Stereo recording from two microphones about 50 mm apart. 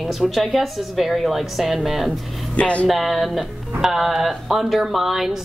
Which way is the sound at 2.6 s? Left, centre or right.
Left.